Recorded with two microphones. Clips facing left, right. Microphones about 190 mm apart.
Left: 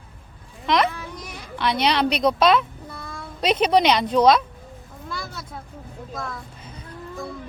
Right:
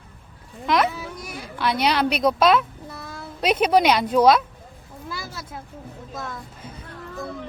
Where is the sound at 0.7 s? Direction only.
5° right (ahead or behind).